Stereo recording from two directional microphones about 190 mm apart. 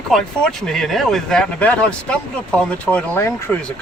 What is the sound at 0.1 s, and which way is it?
Speech, 5° left (ahead or behind).